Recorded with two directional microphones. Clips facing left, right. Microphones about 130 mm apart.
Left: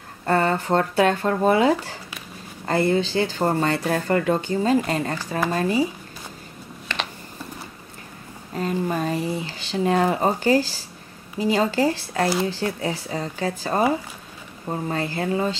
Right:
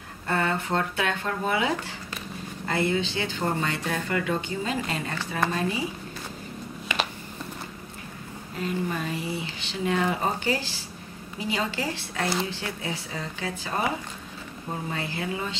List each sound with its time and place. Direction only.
0.3 s speech: 40° left (ahead or behind)
6.9 s a sound: 15° right (ahead or behind)
8.5 s speech: 40° left (ahead or behind)
14.9 s speech: 40° left (ahead or behind)